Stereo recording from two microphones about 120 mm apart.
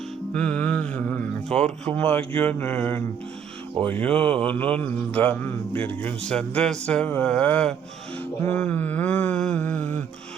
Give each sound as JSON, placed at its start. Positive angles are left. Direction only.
{"t": 0.3, "sound": "mantra", "side_deg": 10}
{"t": 1.5, "sound": "speech", "side_deg": 5}
{"t": 2.0, "sound": "mantra", "side_deg": 15}